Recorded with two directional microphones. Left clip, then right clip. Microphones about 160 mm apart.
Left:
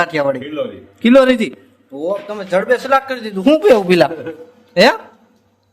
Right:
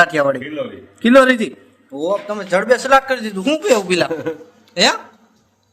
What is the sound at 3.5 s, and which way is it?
Speech, 30° left (ahead or behind).